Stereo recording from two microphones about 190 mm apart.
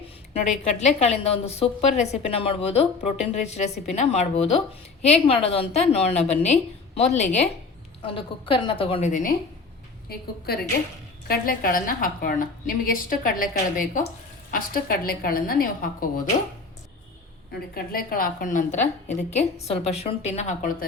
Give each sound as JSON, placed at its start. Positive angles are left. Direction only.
{"t": 0.6, "sound": "a woman's voice", "side_deg": 35}
{"t": 10.1, "sound": "a woman's voice", "side_deg": 55}
{"t": 17.7, "sound": "a woman's voice", "side_deg": 50}